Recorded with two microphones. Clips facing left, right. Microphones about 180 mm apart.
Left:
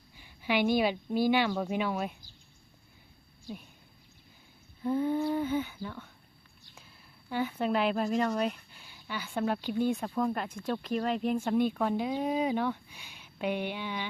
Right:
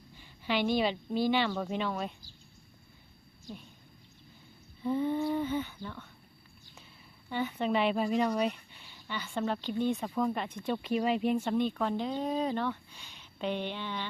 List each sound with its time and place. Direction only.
0.2 s speech: 10° left (ahead or behind)
4.8 s speech: centre (ahead or behind)
7.3 s speech: 5° left (ahead or behind)